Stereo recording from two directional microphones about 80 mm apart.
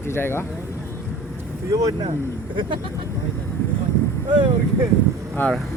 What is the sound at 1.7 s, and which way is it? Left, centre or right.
Speech, right.